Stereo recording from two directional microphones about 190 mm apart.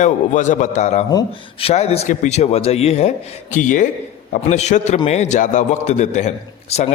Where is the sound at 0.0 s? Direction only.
40° left (ahead or behind).